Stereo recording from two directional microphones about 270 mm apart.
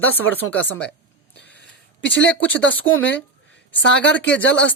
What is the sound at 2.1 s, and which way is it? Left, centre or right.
Speech, left.